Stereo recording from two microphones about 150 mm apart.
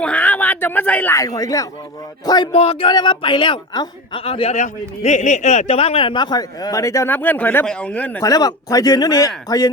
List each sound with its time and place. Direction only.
0.0 s speech: 10° left (ahead or behind); by 2.5 s 25° left (ahead or behind)
2.5 s a woman's voice: 40° left (ahead or behind); by 8.2 s 10° left (ahead or behind)
8.2 s speech: 25° left (ahead or behind)